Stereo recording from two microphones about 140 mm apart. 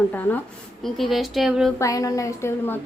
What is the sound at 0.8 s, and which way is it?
Speech, centre (ahead or behind).